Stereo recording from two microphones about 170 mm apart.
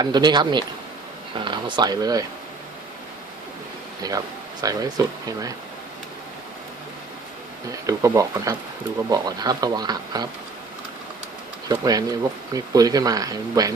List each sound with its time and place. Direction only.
0.0 s speech: 25° right (ahead or behind)
4.0 s speech: 20° right (ahead or behind)
7.9 s speech: 20° right (ahead or behind)
11.7 s speech: 20° right (ahead or behind)